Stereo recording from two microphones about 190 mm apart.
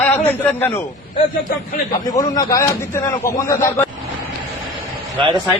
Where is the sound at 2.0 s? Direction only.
20° left (ahead or behind).